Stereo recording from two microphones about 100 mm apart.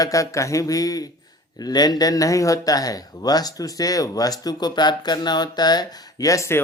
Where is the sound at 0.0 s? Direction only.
35° left (ahead or behind).